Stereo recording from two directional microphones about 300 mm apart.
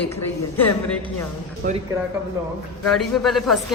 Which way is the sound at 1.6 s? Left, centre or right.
Right.